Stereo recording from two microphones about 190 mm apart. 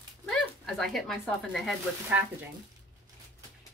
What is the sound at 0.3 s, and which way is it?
Speech, centre (ahead or behind).